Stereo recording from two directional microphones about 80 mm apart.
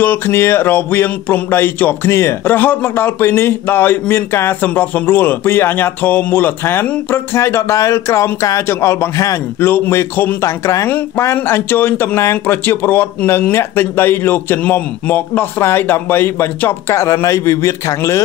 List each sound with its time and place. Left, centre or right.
0.0 s a man's voice: left
9.6 s a man's voice: left
10.4 s speech: left
11.3 s a man's voice: left